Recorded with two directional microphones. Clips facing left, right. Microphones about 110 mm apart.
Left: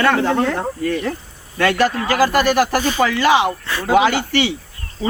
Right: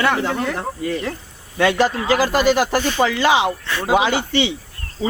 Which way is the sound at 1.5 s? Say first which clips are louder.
Even; 15° right (ahead or behind).